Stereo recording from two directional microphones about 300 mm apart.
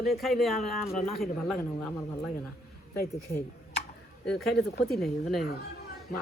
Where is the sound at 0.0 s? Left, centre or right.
Centre.